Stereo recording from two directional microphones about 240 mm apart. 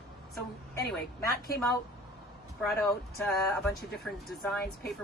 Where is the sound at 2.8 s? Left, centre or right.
Centre.